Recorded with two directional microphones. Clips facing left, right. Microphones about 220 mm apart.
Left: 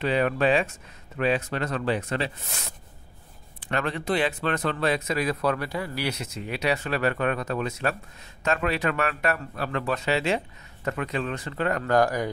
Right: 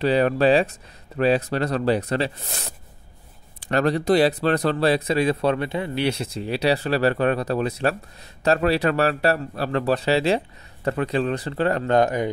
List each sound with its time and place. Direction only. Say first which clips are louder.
0.0 s speech: right 5 dB; 35° right (ahead or behind)